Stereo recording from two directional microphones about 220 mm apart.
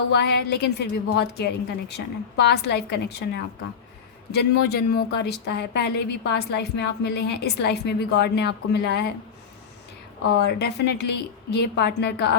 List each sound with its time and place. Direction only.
0.1 s a woman's voice: 50° left (ahead or behind)
10.2 s a woman's voice: 50° left (ahead or behind)